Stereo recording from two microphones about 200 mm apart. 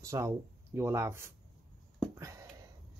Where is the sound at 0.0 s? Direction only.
15° right (ahead or behind).